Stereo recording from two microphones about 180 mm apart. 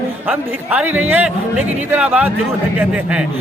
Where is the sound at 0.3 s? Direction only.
10° right (ahead or behind).